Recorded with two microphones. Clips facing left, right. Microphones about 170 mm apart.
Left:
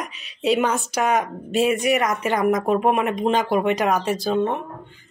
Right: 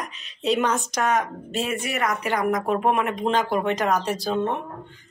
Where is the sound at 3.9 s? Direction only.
Centre (ahead or behind).